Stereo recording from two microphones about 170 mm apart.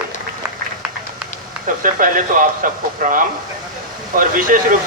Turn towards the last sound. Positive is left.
turn(degrees=-55)  # may be behind; listen again after turning